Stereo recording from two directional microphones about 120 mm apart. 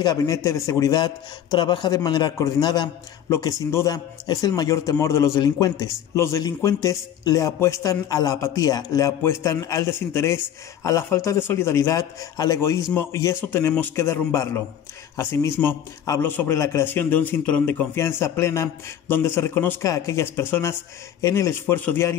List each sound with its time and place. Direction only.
0.0 s a man's voice: 30° left (ahead or behind)
3.3 s a man's voice: 25° left (ahead or behind)
17.9 s a man's voice: 20° left (ahead or behind)